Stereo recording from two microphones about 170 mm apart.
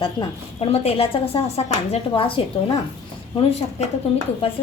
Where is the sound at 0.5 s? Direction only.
35° left (ahead or behind).